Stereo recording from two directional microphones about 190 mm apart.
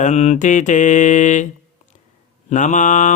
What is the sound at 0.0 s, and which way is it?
Mantra, 35° left (ahead or behind).